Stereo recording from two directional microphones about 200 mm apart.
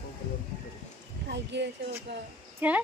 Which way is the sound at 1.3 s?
60° right (ahead or behind).